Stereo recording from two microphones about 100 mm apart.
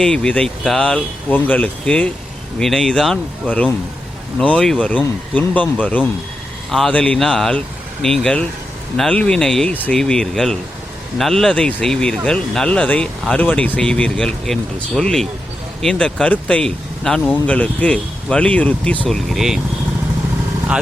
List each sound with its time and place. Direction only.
0.0 s speech: 5° left (ahead or behind)
6.7 s speech: centre (ahead or behind)
19.0 s speech: centre (ahead or behind)